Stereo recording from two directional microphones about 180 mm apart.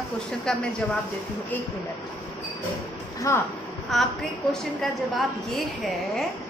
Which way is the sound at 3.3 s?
15° left (ahead or behind).